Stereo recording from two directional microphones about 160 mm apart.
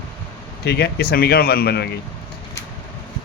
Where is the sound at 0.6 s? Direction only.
90° left.